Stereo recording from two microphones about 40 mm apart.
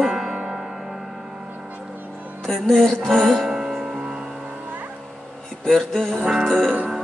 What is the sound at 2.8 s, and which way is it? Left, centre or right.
Music, centre.